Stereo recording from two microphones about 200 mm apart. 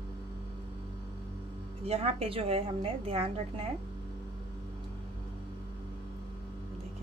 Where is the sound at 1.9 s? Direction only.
30° right (ahead or behind).